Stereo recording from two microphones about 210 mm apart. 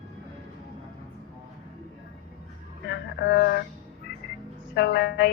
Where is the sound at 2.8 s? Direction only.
55° left (ahead or behind).